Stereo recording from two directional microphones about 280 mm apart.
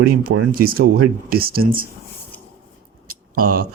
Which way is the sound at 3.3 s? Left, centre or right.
Right.